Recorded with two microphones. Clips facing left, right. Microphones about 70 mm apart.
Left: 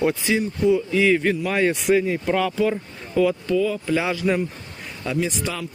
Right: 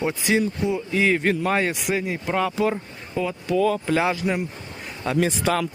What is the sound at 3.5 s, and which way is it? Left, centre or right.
Speech, right.